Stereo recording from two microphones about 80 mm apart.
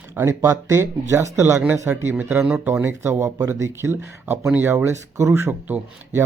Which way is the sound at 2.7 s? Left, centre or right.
Right.